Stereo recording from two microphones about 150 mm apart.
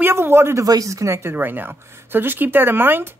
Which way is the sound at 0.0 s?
15° right (ahead or behind).